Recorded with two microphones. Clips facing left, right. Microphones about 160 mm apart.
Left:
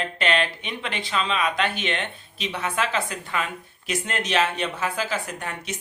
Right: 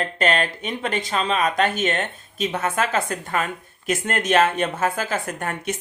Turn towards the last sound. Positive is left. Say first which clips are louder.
# right 5 dB
turn(degrees=-50)  # may be behind; listen again after turning